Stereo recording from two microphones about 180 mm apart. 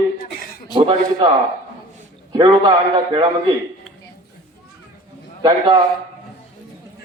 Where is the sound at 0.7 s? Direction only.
25° right (ahead or behind).